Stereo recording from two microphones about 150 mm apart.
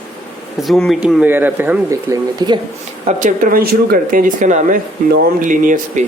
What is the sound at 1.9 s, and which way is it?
Speech, 25° right (ahead or behind).